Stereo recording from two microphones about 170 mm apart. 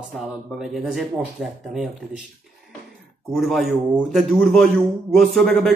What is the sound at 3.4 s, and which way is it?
Speech, centre (ahead or behind).